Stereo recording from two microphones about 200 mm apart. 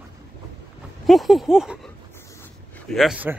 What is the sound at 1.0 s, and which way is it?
Speech, centre (ahead or behind).